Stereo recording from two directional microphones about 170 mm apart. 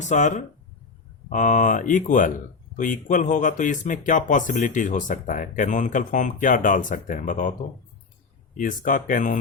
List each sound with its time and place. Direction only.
0.0 s speech: 45° left (ahead or behind)
8.5 s speech: 50° left (ahead or behind)